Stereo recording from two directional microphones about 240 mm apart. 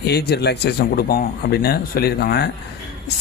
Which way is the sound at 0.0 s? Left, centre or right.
Left.